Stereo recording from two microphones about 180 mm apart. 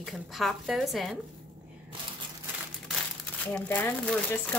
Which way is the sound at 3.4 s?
10° left (ahead or behind).